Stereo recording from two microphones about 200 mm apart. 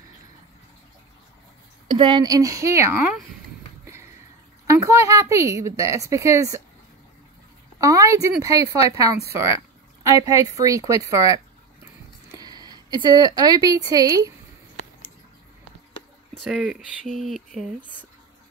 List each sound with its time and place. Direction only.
2.0 s speech: 20° right (ahead or behind)
3.8 s a sound: 15° right (ahead or behind)
4.6 s speech: 15° right (ahead or behind)
7.8 s speech: 15° right (ahead or behind)
16.4 s speech: centre (ahead or behind)